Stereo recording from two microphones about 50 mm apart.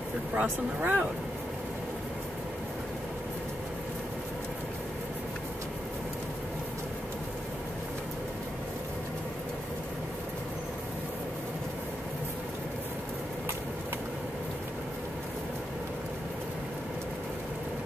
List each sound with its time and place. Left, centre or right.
0.4 s speech: right